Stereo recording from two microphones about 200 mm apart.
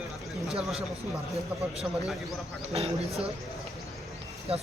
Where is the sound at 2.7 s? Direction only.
30° right (ahead or behind).